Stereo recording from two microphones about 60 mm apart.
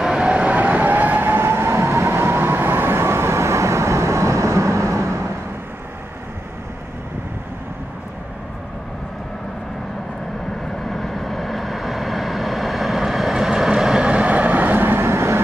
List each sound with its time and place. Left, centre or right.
0.0 s vehicle: centre; by 5.3 s right
10.9 s vehicle: centre; by 15.4 s right